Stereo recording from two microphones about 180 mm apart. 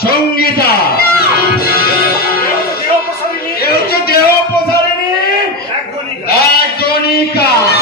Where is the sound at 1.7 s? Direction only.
60° left (ahead or behind).